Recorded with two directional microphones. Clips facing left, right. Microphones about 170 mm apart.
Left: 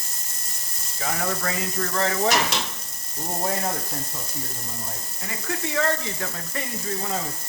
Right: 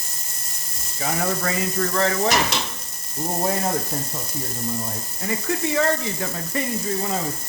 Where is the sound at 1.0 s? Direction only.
5° right (ahead or behind).